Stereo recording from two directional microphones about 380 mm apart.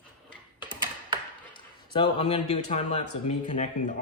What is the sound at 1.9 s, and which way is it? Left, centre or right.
Speech, centre.